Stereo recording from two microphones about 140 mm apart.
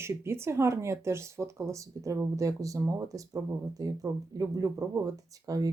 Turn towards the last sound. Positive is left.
turn(degrees=-25)  # may be behind; listen again after turning